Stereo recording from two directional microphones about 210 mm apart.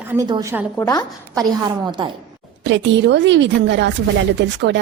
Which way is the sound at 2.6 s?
60° right (ahead or behind).